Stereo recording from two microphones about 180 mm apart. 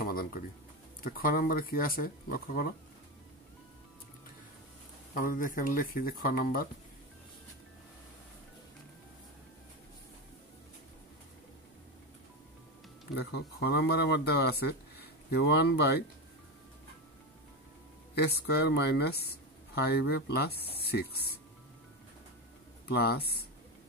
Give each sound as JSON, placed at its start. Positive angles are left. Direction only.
{"t": 0.0, "sound": "a sound", "side_deg": 55}
{"t": 1.0, "sound": "speech", "side_deg": 55}
{"t": 5.1, "sound": "speech", "side_deg": 50}
{"t": 13.1, "sound": "speech", "side_deg": 65}
{"t": 18.2, "sound": "speech", "side_deg": 65}
{"t": 22.8, "sound": "speech", "side_deg": 60}